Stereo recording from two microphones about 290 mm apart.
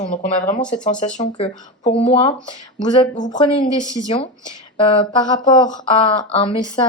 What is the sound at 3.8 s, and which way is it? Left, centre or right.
Speech, centre.